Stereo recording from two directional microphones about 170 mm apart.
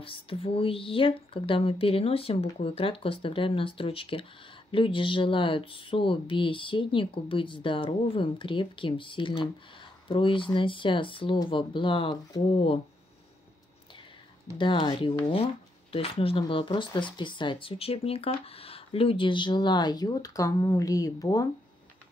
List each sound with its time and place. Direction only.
0.0 s speech: 30° left (ahead or behind)
14.6 s speech: 30° left (ahead or behind)